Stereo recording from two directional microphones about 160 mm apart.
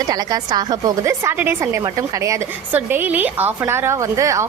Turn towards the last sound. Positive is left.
turn(degrees=-20)  # may be behind; listen again after turning